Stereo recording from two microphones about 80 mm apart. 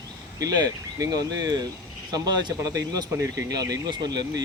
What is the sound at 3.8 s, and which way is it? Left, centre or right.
Speech, right.